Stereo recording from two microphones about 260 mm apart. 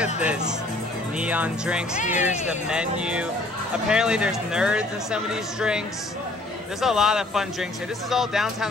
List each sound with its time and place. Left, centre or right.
0.0 s speech: centre
2.0 s speech: left
2.4 s speech: centre
6.8 s speech: centre